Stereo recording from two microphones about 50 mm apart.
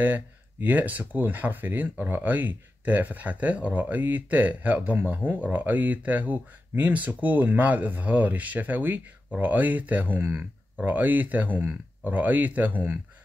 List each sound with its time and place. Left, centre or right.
0.0 s speech: right